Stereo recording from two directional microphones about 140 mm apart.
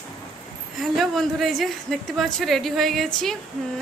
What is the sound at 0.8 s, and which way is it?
A woman's voice, centre (ahead or behind).